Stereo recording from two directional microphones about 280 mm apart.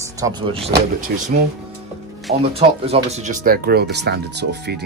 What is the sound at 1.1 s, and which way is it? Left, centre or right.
Speech, right.